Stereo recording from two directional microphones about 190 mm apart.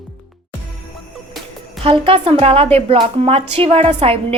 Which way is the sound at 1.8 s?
30° right (ahead or behind).